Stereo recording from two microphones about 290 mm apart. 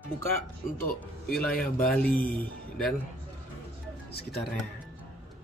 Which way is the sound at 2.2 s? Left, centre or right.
Centre.